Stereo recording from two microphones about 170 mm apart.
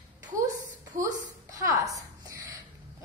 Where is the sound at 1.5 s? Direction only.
20° right (ahead or behind).